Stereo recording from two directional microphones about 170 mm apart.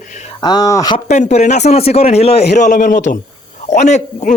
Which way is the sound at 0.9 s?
40° left (ahead or behind).